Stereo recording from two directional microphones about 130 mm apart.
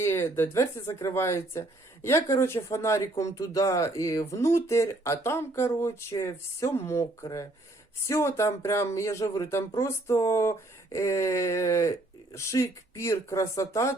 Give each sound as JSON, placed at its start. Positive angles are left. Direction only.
{"t": 0.0, "sound": "speech", "side_deg": 20}